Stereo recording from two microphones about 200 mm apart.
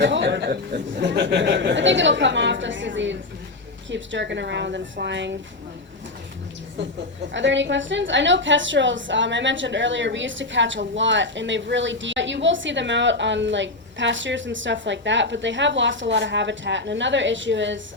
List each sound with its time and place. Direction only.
0.0 s speech: 65° right (ahead or behind)
7.3 s a woman's voice: 65° right (ahead or behind)